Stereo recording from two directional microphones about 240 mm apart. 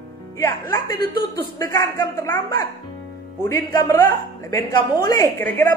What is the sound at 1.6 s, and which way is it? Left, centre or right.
Speech, centre.